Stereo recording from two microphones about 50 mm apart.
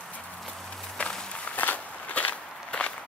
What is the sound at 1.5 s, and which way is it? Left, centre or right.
Walk, left.